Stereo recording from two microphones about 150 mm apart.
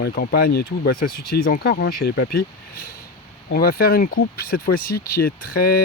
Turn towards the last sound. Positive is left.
turn(degrees=80)